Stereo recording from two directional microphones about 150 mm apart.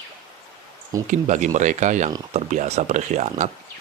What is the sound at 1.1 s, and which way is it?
Speech, 55° right (ahead or behind).